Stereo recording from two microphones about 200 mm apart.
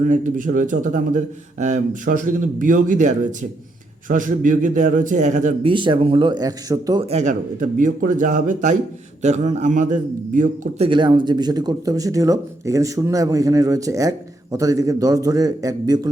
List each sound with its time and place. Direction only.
0.0 s speech: 40° right (ahead or behind)
4.1 s speech: 40° right (ahead or behind)
5.6 s speech: 25° right (ahead or behind)
7.0 s speech: 30° right (ahead or behind)
10.8 s speech: 25° right (ahead or behind)